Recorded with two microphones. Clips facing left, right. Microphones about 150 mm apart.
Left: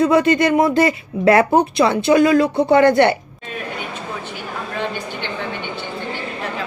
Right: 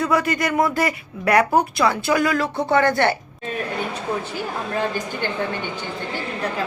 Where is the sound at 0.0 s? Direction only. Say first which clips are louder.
Left 7 dB; 20° left (ahead or behind).